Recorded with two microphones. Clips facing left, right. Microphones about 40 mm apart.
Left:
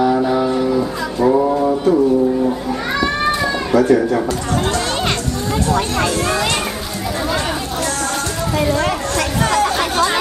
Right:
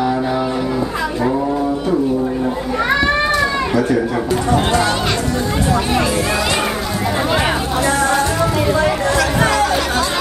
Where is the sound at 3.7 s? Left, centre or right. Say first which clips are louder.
Left 6 dB; centre.